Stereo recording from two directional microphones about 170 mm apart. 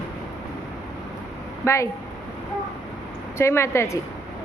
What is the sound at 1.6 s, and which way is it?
Speech, 15° left (ahead or behind).